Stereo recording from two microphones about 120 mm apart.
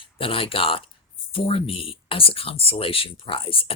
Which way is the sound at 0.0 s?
50° left (ahead or behind).